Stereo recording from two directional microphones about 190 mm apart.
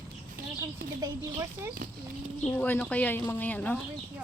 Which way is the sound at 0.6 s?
15° right (ahead or behind).